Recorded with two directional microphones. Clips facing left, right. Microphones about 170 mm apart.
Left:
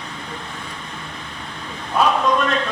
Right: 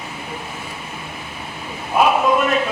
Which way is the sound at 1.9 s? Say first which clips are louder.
Right 2 dB; 15° right (ahead or behind).